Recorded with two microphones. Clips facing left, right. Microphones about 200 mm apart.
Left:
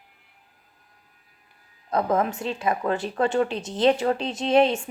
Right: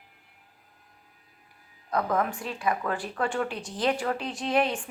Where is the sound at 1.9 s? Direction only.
25° left (ahead or behind).